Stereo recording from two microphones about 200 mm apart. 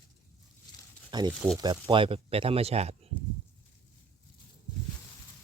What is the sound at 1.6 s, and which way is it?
Speech, 20° right (ahead or behind).